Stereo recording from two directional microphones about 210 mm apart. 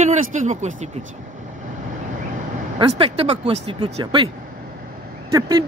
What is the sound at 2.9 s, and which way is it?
Speech, 30° right (ahead or behind).